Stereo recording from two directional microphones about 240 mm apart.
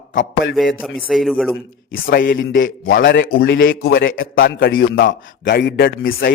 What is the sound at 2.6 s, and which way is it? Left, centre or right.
A man's voice, left.